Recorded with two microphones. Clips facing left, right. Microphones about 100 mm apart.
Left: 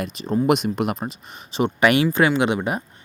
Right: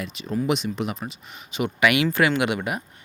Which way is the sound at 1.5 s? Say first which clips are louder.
Left 3 dB; 35° left (ahead or behind).